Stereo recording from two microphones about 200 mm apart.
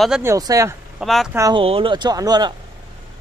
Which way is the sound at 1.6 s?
25° right (ahead or behind).